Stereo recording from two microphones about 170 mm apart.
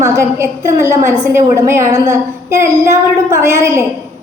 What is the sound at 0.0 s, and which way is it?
A woman's voice, 15° right (ahead or behind).